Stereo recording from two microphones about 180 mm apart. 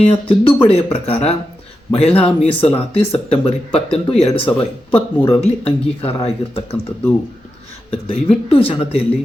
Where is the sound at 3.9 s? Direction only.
30° left (ahead or behind).